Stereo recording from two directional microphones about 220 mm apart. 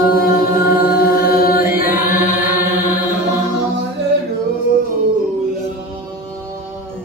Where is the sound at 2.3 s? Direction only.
10° right (ahead or behind).